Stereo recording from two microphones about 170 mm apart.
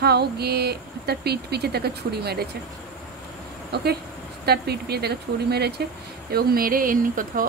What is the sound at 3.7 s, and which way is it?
Speech, 70° right (ahead or behind).